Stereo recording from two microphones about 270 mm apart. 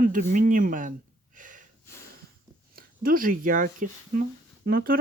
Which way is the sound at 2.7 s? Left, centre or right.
Right.